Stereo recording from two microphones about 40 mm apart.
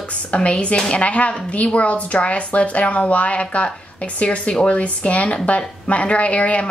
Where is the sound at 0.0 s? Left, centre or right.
Left.